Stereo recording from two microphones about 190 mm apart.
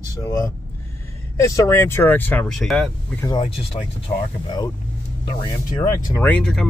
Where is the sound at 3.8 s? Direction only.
35° left (ahead or behind).